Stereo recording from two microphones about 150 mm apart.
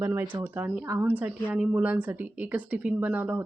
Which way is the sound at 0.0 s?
15° right (ahead or behind).